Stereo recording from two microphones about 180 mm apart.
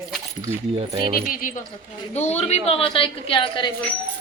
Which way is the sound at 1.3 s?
50° left (ahead or behind).